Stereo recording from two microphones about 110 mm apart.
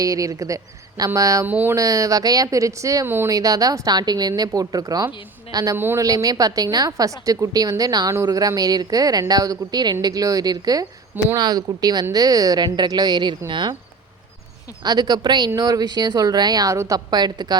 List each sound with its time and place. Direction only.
0.0 s speech: 30° right (ahead or behind)
1.5 s speech: 15° right (ahead or behind)
1.7 s speech: 30° right (ahead or behind)
5.7 s speech: 20° right (ahead or behind)
6.0 s speech: 30° right (ahead or behind)
14.8 s speech: 40° right (ahead or behind)